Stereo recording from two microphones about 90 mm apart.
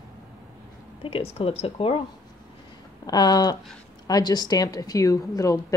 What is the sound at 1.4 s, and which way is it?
Speech, 90° left.